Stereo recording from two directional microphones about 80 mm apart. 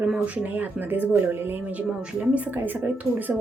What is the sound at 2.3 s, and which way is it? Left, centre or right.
Speech, centre.